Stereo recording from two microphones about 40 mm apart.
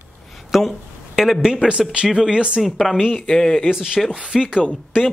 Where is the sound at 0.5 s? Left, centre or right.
Centre.